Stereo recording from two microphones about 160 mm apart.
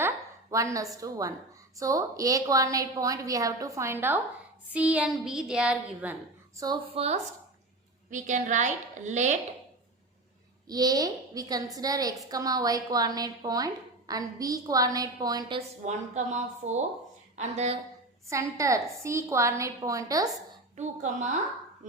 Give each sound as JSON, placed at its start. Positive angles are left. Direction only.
{"t": 0.5, "sound": "a woman's voice", "side_deg": -20}
{"t": 4.7, "sound": "a sound", "side_deg": -10}
{"t": 6.9, "sound": "speech", "side_deg": -40}
{"t": 8.1, "sound": "a woman's voice", "side_deg": -50}
{"t": 10.7, "sound": "a woman's voice", "side_deg": -25}
{"t": 15.5, "sound": "a woman's voice", "side_deg": -45}
{"t": 18.5, "sound": "a woman's voice", "side_deg": -20}
{"t": 20.7, "sound": "a woman's voice", "side_deg": -45}